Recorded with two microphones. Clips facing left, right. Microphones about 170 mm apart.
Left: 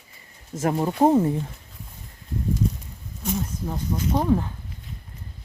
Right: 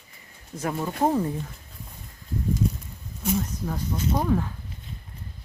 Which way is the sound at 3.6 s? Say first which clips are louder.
Left 1 dB; 15° left (ahead or behind).